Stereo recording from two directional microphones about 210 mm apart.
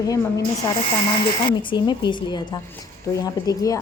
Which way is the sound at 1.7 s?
20° left (ahead or behind).